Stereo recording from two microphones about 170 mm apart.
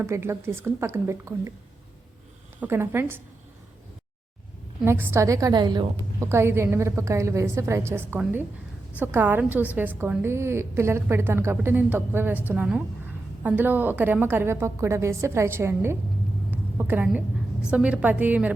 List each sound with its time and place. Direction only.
0.0 s a woman's voice: 15° right (ahead or behind)
2.6 s a woman's voice: 15° right (ahead or behind)
4.9 s a woman's voice: 15° right (ahead or behind)
16.5 s a sound: 10° right (ahead or behind)
17.7 s a woman's voice: 5° right (ahead or behind)